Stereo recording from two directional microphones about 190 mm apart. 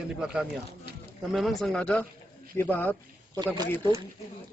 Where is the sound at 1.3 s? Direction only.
Centre (ahead or behind).